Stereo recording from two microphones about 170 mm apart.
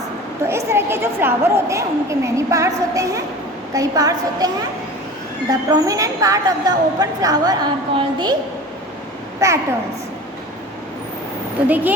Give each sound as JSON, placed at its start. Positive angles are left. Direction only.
{"t": 0.4, "sound": "a woman's voice", "side_deg": -15}
{"t": 9.4, "sound": "a woman's voice", "side_deg": -20}
{"t": 11.7, "sound": "a woman's voice", "side_deg": -10}